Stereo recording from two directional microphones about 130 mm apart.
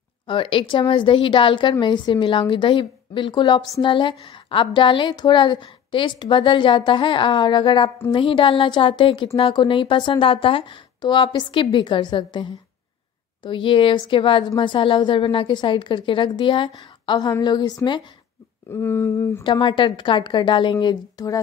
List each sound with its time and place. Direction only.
0.3 s a woman's voice: 45° left (ahead or behind)
18.7 s a sound: 20° left (ahead or behind)
19.4 s a woman's voice: 35° left (ahead or behind)